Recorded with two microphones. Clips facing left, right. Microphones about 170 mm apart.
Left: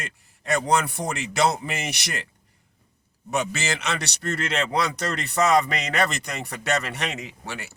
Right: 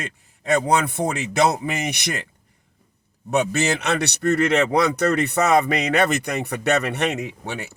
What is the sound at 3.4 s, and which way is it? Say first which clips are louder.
Speech: right 6 dB; 60° right (ahead or behind).